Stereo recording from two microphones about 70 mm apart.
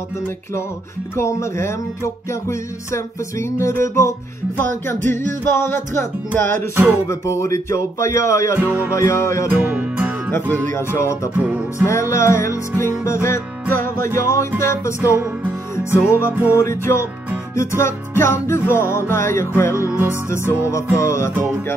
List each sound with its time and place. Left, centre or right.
1.1 s music: left
4.6 s music: left
6.7 s music: right
7.1 s music: left
9.6 s music: right
10.3 s music: left
11.3 s music: centre
11.8 s music: left
16.3 s music: right
16.5 s music: left